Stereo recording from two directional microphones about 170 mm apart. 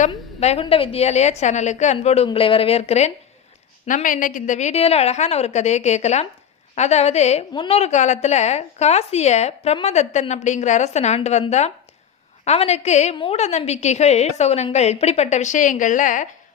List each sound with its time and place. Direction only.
0.1 s a woman's voice: 40° left (ahead or behind)
3.8 s a woman's voice: 50° left (ahead or behind)